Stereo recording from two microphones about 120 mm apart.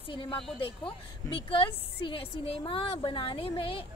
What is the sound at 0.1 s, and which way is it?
A woman's voice, 45° left (ahead or behind).